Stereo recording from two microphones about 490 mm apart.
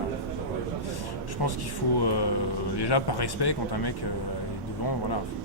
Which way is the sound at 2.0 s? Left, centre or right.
Left.